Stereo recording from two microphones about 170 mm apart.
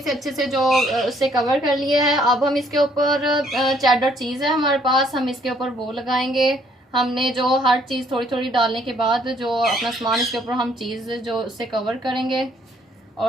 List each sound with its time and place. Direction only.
0.0 s speech: centre (ahead or behind)